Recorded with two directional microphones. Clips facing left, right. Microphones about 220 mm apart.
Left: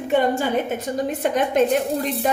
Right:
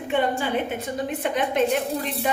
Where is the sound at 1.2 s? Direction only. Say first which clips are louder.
Left 4 dB; 45° left (ahead or behind).